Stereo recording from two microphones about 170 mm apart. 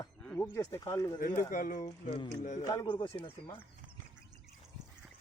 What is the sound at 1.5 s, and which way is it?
Speech, 55° left (ahead or behind).